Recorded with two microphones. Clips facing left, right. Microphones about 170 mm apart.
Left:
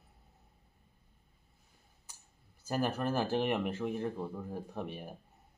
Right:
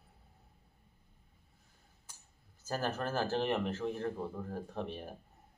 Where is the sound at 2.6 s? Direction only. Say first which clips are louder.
Left 3 dB; 10° left (ahead or behind).